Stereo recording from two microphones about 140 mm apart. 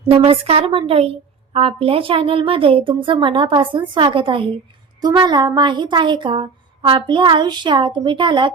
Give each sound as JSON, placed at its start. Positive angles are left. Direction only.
{"t": 0.1, "sound": "a woman's voice", "side_deg": -45}